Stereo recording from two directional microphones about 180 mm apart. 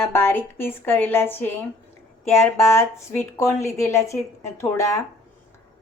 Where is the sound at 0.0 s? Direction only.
10° left (ahead or behind).